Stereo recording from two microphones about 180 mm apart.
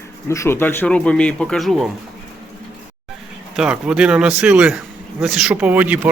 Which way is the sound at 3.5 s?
5° right (ahead or behind).